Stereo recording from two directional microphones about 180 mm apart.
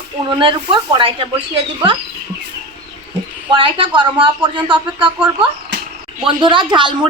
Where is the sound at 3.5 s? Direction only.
30° right (ahead or behind).